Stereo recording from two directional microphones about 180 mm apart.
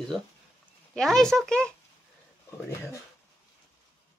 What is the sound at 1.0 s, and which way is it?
Speech, 5° left (ahead or behind).